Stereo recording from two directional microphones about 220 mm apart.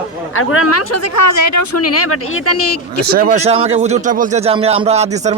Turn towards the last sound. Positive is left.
turn(degrees=-30)  # may be behind; listen again after turning